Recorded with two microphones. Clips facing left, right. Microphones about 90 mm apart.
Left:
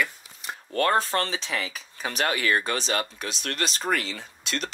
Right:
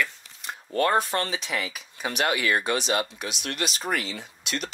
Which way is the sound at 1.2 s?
35° left (ahead or behind).